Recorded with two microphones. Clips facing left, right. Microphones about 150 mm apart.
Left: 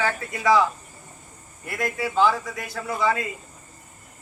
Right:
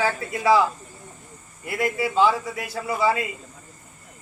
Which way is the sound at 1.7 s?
5° right (ahead or behind).